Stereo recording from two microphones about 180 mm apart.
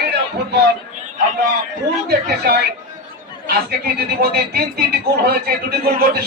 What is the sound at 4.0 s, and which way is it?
A man's voice, 60° right (ahead or behind).